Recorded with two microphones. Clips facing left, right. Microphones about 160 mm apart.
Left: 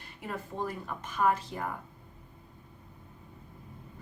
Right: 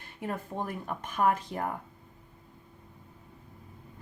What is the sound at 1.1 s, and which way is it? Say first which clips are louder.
Speech: right 1 dB; 50° right (ahead or behind).